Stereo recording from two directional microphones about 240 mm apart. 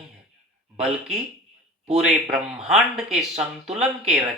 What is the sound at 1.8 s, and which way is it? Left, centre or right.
Speech, right.